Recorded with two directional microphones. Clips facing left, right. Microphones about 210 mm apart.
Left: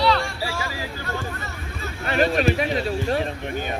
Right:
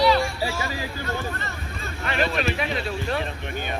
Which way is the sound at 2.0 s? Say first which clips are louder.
Left 5 dB; 40° left (ahead or behind).